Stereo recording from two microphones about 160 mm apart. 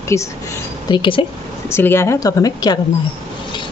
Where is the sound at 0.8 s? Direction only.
30° left (ahead or behind).